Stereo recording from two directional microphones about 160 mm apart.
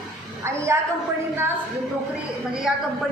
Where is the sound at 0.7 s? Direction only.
15° right (ahead or behind).